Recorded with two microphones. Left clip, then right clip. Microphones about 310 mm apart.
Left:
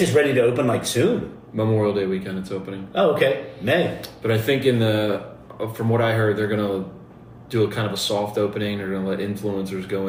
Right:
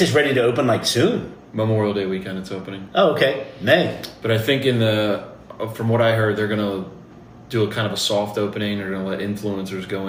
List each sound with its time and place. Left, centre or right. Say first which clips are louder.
0.1 s a man's voice: even; right
1.5 s speech: even; centre
2.9 s a man's voice: right 2 dB; right
4.0 s speech: right 2 dB; centre